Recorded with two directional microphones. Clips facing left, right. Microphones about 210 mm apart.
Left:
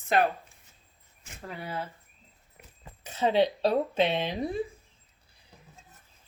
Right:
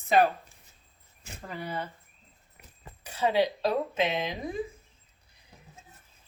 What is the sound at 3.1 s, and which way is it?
Speech, 25° left (ahead or behind).